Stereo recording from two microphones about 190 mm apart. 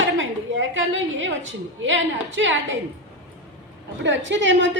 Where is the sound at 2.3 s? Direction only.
75° right (ahead or behind).